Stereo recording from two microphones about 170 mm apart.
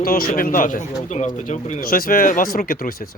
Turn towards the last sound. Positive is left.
turn(degrees=55)  # may be behind; listen again after turning